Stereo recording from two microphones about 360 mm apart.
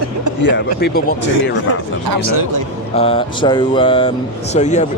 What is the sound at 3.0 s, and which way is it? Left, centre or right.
Mantra, centre.